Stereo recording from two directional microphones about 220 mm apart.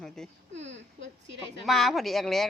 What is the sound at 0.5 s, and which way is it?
Speech, 55° right (ahead or behind).